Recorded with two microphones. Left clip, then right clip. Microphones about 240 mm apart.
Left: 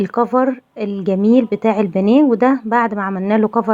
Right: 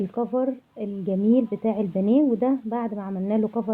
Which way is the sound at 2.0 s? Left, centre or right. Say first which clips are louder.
Left 8 dB; centre.